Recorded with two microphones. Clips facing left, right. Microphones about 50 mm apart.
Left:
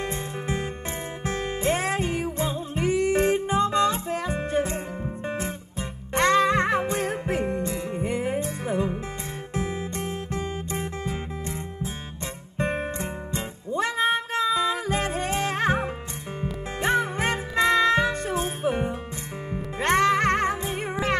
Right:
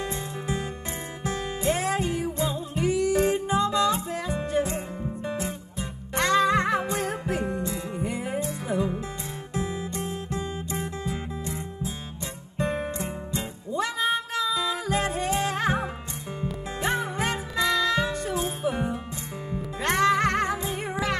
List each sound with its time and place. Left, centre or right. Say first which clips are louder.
0.0 s music: left 1 dB; left